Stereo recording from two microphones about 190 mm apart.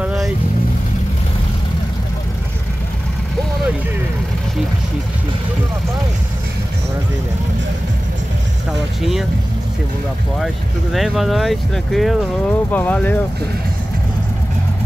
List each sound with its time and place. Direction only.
0.0 s vehicle: 5° right (ahead or behind)
10.4 s speech: centre (ahead or behind)